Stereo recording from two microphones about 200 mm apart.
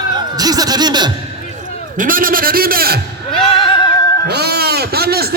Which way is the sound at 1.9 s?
45° right (ahead or behind).